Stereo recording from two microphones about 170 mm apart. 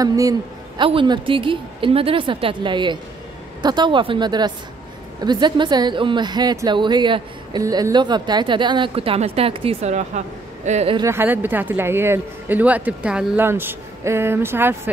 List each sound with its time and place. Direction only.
0.0 s a man's voice: 20° right (ahead or behind); by 11.0 s 40° right (ahead or behind)
11.0 s speech: 15° right (ahead or behind)